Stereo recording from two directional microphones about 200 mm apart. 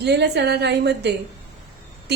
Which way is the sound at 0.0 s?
55° right (ahead or behind).